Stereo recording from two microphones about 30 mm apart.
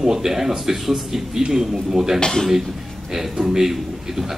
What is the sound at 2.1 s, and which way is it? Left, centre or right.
Speech, left.